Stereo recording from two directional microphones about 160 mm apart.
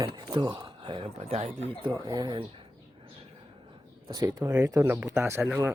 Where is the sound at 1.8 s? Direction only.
25° right (ahead or behind).